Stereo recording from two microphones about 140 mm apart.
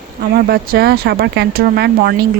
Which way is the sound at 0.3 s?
90° right.